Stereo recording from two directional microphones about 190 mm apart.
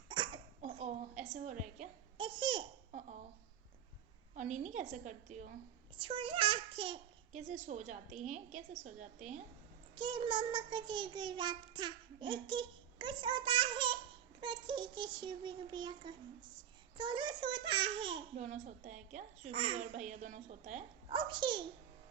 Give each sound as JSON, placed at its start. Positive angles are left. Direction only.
{"t": 0.7, "sound": "a woman's voice", "side_deg": -35}
{"t": 2.1, "sound": "speech", "side_deg": -25}
{"t": 4.4, "sound": "a child's voice", "side_deg": -40}
{"t": 6.0, "sound": "a child's voice", "side_deg": -30}
{"t": 9.9, "sound": "a child's voice", "side_deg": -25}
{"t": 18.4, "sound": "a child's voice", "side_deg": -40}
{"t": 19.8, "sound": "a child's voice", "side_deg": -40}
{"t": 21.1, "sound": "a child's voice", "side_deg": -25}